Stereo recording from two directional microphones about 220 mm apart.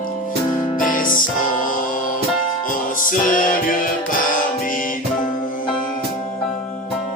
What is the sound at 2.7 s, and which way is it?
Music, 40° left (ahead or behind).